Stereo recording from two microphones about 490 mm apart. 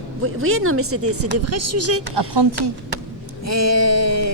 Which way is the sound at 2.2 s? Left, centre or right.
Right.